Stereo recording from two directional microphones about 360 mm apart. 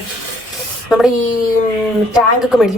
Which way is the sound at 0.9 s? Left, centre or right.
Centre.